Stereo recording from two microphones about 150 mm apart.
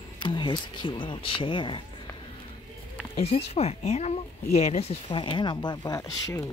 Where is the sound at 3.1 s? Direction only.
45° left (ahead or behind).